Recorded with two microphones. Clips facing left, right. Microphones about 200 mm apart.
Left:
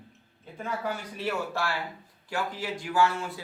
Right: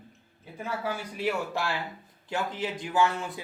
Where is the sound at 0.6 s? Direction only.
5° right (ahead or behind).